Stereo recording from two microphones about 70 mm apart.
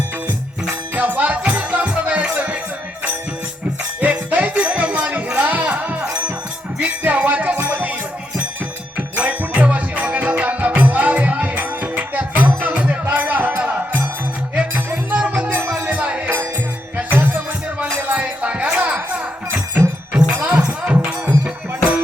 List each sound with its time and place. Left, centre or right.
0.7 s music: centre
4.0 s music: right
9.0 s music: right
15.3 s music: right
15.9 s music: centre